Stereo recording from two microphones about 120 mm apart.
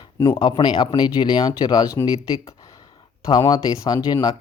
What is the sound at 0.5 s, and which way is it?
Speech, 40° left (ahead or behind).